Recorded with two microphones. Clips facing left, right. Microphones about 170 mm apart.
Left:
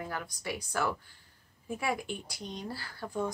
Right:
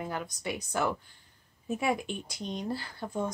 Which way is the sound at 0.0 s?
20° right (ahead or behind).